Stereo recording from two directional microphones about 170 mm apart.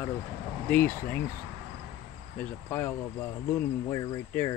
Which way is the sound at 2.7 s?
15° left (ahead or behind).